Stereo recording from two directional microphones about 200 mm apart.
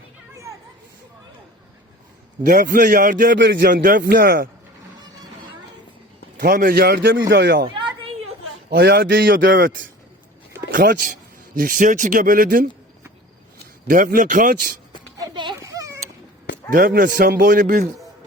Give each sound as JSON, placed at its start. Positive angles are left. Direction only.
{"t": 2.4, "sound": "a man's voice", "side_deg": -45}
{"t": 3.3, "sound": "a man's voice", "side_deg": -65}
{"t": 3.6, "sound": "a man's voice", "side_deg": -45}
{"t": 6.3, "sound": "a man's voice", "side_deg": -45}
{"t": 7.6, "sound": "a sound", "side_deg": -25}
{"t": 8.7, "sound": "a man's voice", "side_deg": -50}
{"t": 10.7, "sound": "speech", "side_deg": -45}
{"t": 13.8, "sound": "a man's voice", "side_deg": -45}
{"t": 15.4, "sound": "a sound", "side_deg": -20}
{"t": 16.7, "sound": "a man's voice", "side_deg": -45}